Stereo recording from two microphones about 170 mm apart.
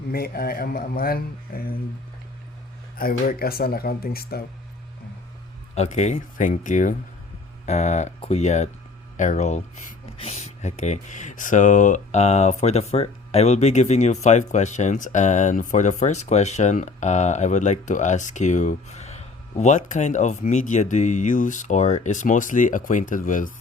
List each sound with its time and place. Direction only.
0.1 s a man's voice: 60° left (ahead or behind)
3.0 s a man's voice: 60° left (ahead or behind)
5.7 s speech: 40° left (ahead or behind)